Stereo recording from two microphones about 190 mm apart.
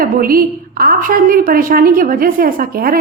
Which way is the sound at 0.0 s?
50° right (ahead or behind).